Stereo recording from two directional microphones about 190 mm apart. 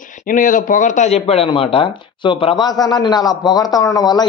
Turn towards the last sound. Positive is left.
turn(degrees=20)  # may be behind; listen again after turning